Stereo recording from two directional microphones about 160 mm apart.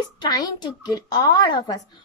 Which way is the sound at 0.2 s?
25° left (ahead or behind).